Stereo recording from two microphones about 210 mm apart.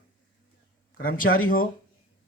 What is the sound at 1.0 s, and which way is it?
Speech, 45° left (ahead or behind).